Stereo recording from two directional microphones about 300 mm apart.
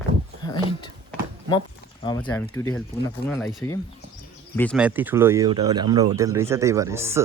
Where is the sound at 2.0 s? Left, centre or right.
Centre.